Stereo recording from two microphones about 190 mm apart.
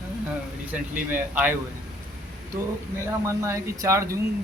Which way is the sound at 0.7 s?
10° right (ahead or behind).